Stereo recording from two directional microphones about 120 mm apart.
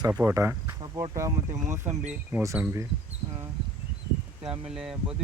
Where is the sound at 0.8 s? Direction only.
40° right (ahead or behind).